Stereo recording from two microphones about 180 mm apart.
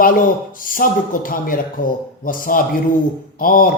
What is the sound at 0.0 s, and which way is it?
A man's voice, 50° left (ahead or behind).